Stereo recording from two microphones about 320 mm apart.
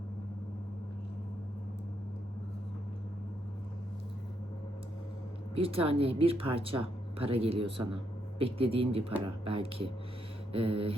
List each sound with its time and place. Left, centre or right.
5.5 s speech: centre